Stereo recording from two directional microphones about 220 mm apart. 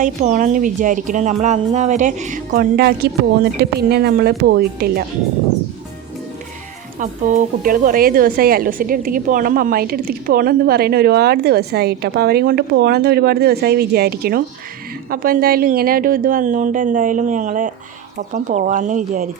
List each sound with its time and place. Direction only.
0.0 s speech: 35° right (ahead or behind)
7.0 s a woman's voice: 35° right (ahead or behind)